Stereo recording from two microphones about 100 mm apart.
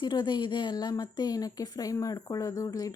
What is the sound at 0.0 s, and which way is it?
A woman's voice, 50° left (ahead or behind).